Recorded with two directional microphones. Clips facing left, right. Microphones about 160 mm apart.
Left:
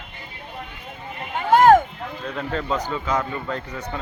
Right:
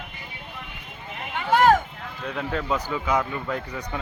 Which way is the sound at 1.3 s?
45° left (ahead or behind).